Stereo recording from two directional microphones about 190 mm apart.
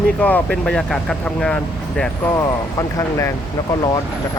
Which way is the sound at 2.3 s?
15° left (ahead or behind).